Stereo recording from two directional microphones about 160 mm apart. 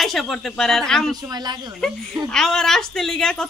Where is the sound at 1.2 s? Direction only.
25° right (ahead or behind).